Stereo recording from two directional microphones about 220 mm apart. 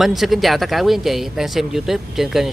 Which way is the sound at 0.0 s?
Centre (ahead or behind).